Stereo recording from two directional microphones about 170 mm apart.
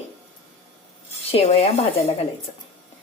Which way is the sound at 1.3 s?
35° left (ahead or behind).